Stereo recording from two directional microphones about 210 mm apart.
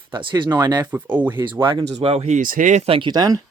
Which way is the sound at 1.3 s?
20° right (ahead or behind).